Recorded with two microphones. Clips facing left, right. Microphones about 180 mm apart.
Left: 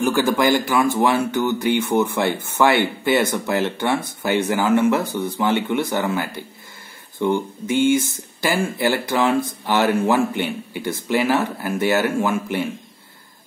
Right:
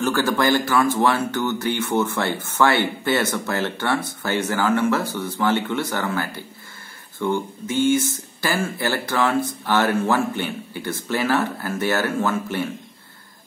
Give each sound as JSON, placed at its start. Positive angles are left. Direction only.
{"t": 0.0, "sound": "speech", "side_deg": 15}